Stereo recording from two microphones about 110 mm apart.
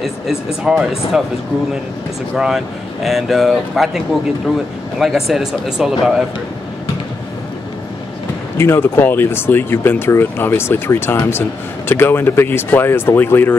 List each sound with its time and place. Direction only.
0.7 s speech: 5° right (ahead or behind)
2.3 s speech: 5° right (ahead or behind)
8.5 s speech: 20° left (ahead or behind)